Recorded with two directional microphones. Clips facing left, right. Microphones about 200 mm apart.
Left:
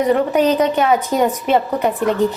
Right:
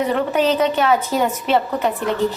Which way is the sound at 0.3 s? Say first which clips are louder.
Left 2 dB; 10° left (ahead or behind).